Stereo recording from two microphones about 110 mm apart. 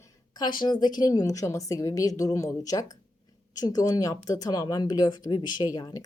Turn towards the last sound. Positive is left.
turn(degrees=35)  # may be behind; listen again after turning